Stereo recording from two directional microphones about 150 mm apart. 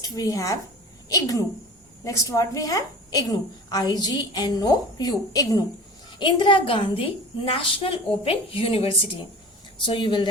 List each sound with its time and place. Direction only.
0.0 s a woman's voice: 25° left (ahead or behind)